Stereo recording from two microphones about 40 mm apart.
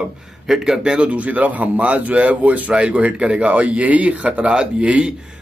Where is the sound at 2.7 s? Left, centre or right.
Right.